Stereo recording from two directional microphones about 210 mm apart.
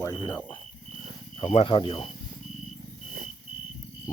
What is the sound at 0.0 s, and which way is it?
Speech, 15° left (ahead or behind).